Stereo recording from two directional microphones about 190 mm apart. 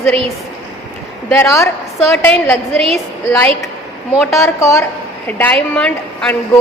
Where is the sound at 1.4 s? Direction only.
15° left (ahead or behind).